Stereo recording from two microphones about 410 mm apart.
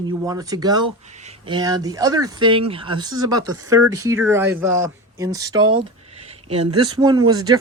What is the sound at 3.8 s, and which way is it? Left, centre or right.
Speech, right.